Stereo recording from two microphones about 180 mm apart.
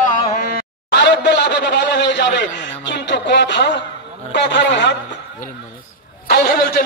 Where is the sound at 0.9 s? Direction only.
70° left (ahead or behind).